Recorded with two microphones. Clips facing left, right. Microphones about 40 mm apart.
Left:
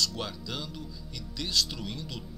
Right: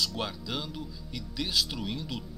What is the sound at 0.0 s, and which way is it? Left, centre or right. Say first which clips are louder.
Speech: even; centre.